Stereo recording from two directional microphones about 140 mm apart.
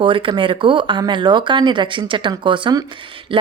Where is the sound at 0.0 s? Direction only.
35° right (ahead or behind).